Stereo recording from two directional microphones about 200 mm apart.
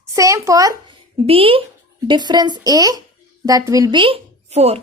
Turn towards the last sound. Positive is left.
turn(degrees=-30)  # may be behind; listen again after turning